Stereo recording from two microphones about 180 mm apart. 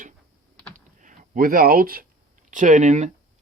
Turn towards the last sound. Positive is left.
turn(degrees=-40)  # may be behind; listen again after turning